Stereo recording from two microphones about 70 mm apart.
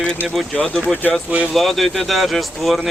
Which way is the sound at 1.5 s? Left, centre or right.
Centre.